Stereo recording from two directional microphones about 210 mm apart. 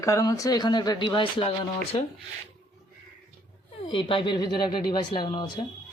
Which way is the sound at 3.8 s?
25° left (ahead or behind).